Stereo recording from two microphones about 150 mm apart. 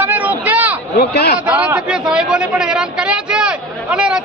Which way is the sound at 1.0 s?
90° left.